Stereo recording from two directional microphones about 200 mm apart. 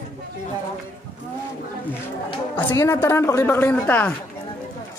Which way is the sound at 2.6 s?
15° left (ahead or behind).